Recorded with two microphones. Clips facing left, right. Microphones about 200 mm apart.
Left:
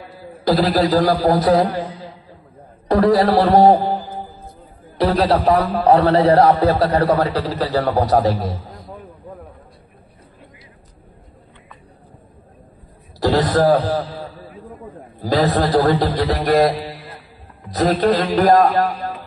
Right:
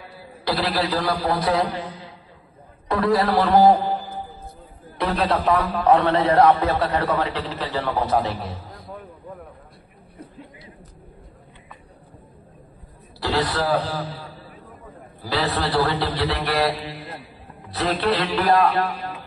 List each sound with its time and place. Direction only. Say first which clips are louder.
0.5 s a man's voice: left 8 dB; 45° left (ahead or behind)
2.9 s a man's voice: left 6 dB; 40° left (ahead or behind)
4.9 s a man's voice: left 6 dB; 35° left (ahead or behind)
13.2 s a man's voice: left 8 dB; 45° left (ahead or behind)
15.2 s a man's voice: left 7 dB; 45° left (ahead or behind)